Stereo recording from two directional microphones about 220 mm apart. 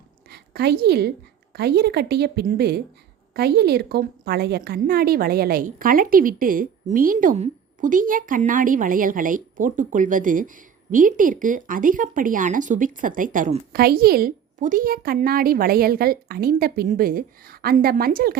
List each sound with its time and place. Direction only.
0.3 s a woman's voice: 45° right (ahead or behind)